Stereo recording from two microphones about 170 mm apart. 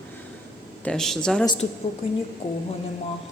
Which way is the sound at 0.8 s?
5° left (ahead or behind).